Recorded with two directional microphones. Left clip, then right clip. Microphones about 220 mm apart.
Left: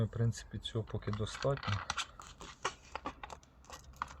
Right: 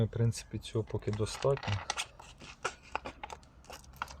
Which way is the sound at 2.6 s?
15° right (ahead or behind).